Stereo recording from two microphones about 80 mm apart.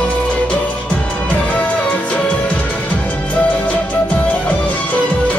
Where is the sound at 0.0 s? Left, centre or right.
Centre.